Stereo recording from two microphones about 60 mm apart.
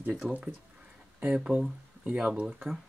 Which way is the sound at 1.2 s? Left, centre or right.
Centre.